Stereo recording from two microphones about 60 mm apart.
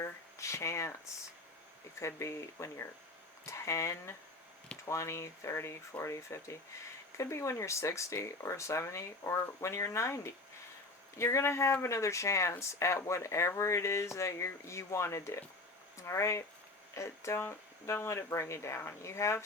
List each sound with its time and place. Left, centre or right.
0.0 s speech: left
2.0 s speech: left